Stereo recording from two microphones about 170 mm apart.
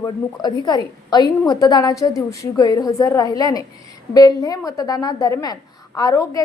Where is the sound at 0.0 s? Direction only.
25° left (ahead or behind).